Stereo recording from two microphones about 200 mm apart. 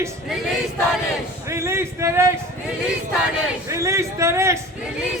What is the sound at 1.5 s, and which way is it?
Speech, 15° right (ahead or behind).